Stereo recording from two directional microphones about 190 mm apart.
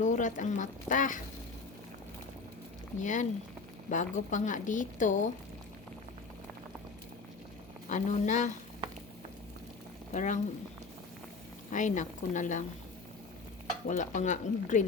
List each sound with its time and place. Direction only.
0.0 s a woman's voice: 40° left (ahead or behind)
3.0 s a woman's voice: 40° left (ahead or behind)
7.9 s a woman's voice: 40° left (ahead or behind)
10.1 s speech: 40° left (ahead or behind)
11.7 s a woman's voice: 40° left (ahead or behind)
13.8 s a woman's voice: 40° left (ahead or behind)